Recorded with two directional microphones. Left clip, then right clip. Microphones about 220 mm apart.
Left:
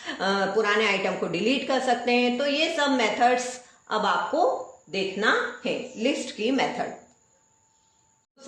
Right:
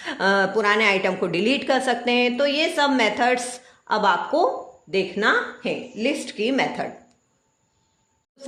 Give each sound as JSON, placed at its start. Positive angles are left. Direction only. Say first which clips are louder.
{"t": 0.0, "sound": "a woman's voice", "louder": "right 5 dB", "side_deg": -50}